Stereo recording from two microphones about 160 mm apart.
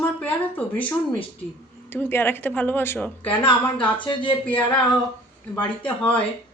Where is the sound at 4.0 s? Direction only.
30° left (ahead or behind).